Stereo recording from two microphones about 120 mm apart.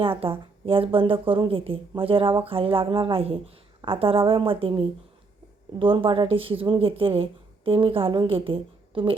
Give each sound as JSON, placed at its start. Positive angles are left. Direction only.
{"t": 0.0, "sound": "a woman's voice", "side_deg": -50}